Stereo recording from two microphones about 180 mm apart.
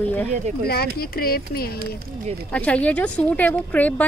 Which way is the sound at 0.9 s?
55° left (ahead or behind).